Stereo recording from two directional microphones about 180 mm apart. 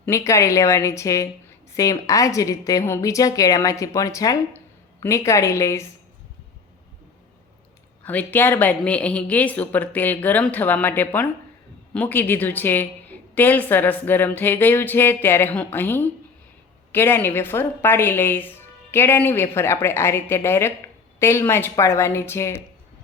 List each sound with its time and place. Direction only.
0.0 s a woman's voice: 15° left (ahead or behind)
8.0 s a woman's voice: 10° left (ahead or behind)